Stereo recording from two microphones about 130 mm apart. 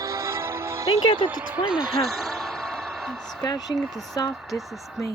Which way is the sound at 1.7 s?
5° right (ahead or behind).